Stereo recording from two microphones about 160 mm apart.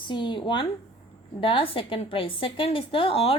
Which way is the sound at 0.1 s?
30° left (ahead or behind).